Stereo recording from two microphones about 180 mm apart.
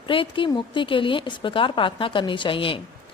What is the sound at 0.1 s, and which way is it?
A woman's voice, 30° left (ahead or behind).